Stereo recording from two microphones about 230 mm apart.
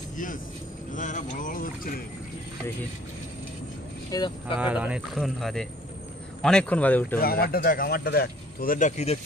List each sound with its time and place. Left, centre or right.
0.9 s speech: left
4.1 s speech: centre
4.6 s speech: centre
7.2 s speech: left